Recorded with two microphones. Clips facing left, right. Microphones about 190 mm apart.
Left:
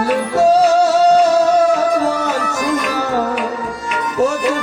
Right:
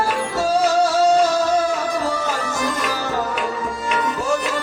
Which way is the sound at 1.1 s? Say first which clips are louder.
Left 5 dB; 65° left (ahead or behind).